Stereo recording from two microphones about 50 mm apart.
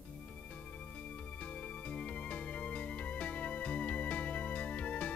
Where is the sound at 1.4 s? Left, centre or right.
Left.